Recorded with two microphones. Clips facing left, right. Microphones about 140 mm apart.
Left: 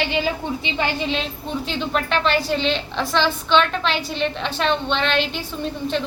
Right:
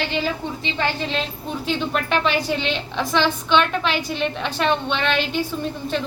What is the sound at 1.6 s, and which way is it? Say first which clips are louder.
A woman's voice: right 2 dB; 10° right (ahead or behind).